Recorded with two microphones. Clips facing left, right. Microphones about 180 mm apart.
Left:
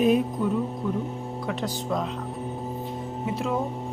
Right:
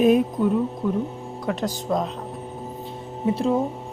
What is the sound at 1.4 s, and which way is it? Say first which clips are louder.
Speech: right 5 dB; 40° right (ahead or behind).